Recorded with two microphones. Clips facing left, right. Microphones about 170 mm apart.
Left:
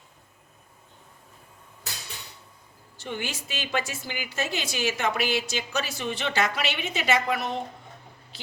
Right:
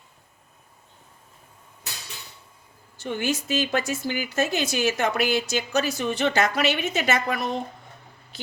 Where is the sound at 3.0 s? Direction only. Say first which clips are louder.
Right 7 dB; 45° right (ahead or behind).